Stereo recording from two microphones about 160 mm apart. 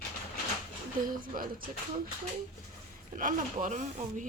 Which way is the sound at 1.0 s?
60° right (ahead or behind).